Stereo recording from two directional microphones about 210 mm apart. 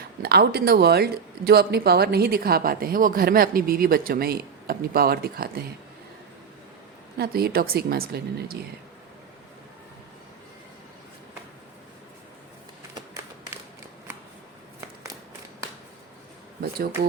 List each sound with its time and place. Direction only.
0.2 s speech: 50° right (ahead or behind)
7.2 s speech: 45° right (ahead or behind)
16.6 s speech: 45° right (ahead or behind)